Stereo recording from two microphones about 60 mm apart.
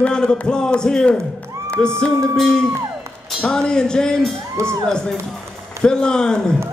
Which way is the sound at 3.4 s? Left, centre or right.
Centre.